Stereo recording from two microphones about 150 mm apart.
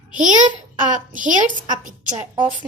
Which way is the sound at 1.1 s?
60° right (ahead or behind).